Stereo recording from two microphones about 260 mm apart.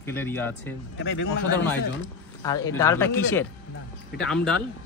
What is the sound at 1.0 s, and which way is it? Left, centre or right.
Speech, left.